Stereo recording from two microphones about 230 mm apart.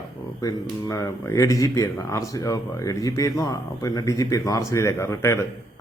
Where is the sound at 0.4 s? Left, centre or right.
Centre.